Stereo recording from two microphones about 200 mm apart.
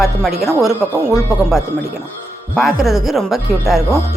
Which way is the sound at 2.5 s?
Centre (ahead or behind).